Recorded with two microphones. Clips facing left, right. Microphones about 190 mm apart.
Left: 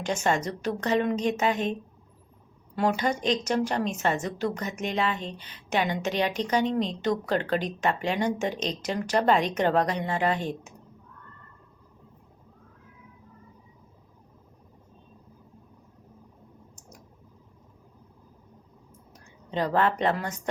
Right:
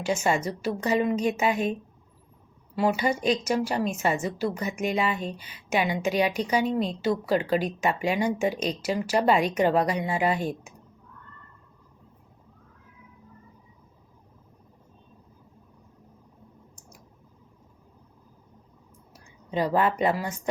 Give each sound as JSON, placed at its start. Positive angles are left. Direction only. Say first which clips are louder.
{"t": 0.0, "sound": "a woman's voice", "louder": "right 1 dB", "side_deg": -5}
{"t": 2.7, "sound": "a woman's voice", "louder": "right 1 dB", "side_deg": -5}
{"t": 19.1, "sound": "speech", "louder": "right 2 dB", "side_deg": -10}